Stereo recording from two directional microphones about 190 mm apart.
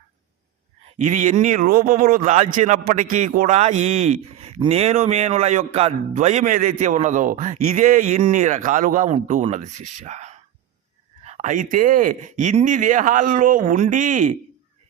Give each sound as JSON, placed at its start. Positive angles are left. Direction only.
{"t": 1.0, "sound": "a man's voice", "side_deg": -40}